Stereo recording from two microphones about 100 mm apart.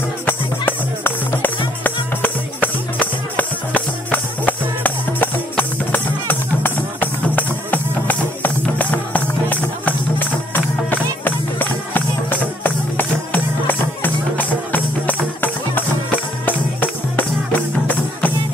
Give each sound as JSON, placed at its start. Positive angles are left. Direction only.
{"t": 0.3, "sound": "music", "side_deg": 20}